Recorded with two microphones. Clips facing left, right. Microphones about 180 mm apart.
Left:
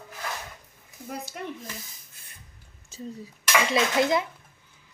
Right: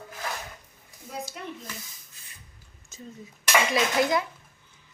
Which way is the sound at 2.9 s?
30° left (ahead or behind).